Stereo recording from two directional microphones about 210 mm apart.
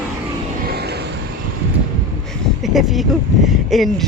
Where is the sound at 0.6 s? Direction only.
50° right (ahead or behind).